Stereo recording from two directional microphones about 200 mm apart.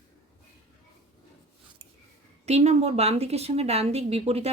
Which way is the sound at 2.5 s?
35° right (ahead or behind).